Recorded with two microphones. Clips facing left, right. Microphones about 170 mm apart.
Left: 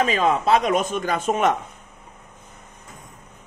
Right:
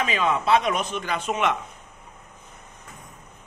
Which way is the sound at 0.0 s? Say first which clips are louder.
Left 4 dB; 40° left (ahead or behind).